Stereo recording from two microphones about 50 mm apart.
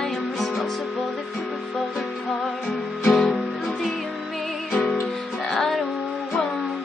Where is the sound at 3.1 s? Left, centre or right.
Centre.